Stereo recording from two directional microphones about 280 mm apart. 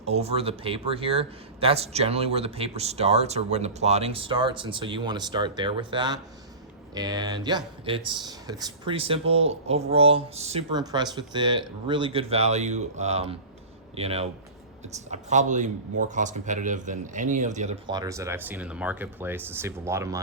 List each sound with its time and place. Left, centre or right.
0.0 s a man's voice: right